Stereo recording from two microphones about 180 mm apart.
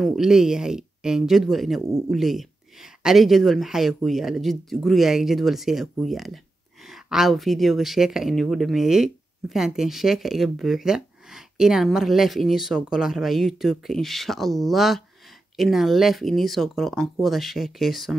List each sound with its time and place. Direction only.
0.0 s speech: centre (ahead or behind)